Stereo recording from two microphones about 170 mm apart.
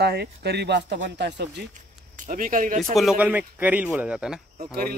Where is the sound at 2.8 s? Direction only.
Centre (ahead or behind).